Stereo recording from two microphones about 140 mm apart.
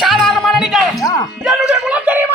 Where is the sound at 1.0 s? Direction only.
25° left (ahead or behind).